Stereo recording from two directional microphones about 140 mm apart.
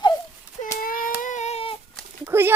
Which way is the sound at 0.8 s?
90° left.